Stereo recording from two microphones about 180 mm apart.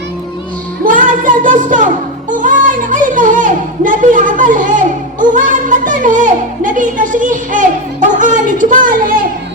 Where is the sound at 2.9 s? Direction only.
45° right (ahead or behind).